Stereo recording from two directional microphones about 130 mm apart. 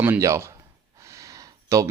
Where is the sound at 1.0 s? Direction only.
25° right (ahead or behind).